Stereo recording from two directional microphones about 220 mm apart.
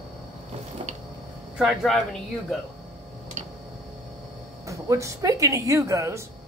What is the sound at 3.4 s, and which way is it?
Tick-tock, 30° right (ahead or behind).